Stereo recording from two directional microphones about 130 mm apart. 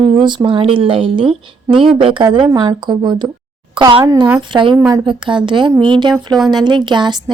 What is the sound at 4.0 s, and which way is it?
Speech, 25° right (ahead or behind).